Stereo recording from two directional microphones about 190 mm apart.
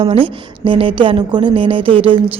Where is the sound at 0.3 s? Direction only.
25° right (ahead or behind).